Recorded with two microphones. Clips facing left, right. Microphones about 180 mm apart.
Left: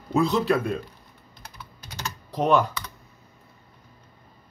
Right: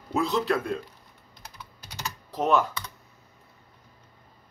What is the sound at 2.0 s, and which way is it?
Typing, 5° right (ahead or behind).